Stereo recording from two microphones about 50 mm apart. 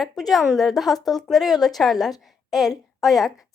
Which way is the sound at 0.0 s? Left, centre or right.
Centre.